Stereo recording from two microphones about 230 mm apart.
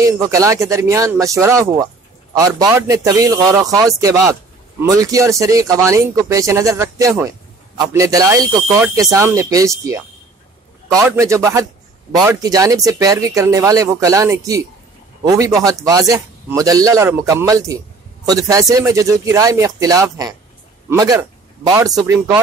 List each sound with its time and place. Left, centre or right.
0.0 s speech: centre